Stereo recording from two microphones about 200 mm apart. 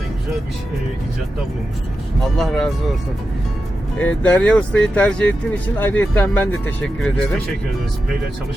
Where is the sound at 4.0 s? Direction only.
10° left (ahead or behind).